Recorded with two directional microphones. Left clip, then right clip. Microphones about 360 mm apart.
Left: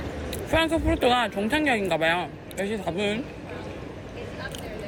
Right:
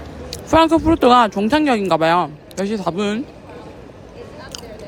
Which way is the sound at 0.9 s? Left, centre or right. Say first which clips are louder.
Right 10 dB; centre.